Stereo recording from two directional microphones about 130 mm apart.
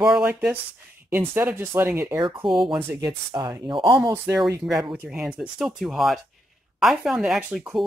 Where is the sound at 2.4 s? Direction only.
40° right (ahead or behind).